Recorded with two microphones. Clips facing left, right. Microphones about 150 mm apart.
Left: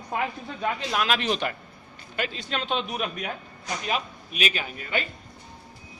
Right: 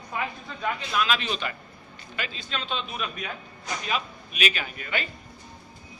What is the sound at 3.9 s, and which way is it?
Speech, 40° left (ahead or behind).